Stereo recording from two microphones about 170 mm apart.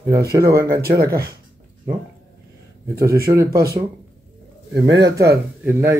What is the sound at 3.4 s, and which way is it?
Speech, 65° right (ahead or behind).